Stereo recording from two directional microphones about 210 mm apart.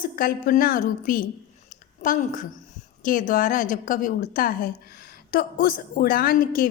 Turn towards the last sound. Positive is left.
turn(degrees=40)  # may be behind; listen again after turning